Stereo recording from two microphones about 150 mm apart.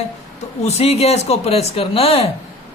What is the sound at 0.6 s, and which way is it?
A man's voice, 45° left (ahead or behind).